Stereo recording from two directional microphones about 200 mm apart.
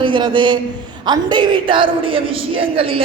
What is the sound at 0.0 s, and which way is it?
A man's voice, 25° right (ahead or behind).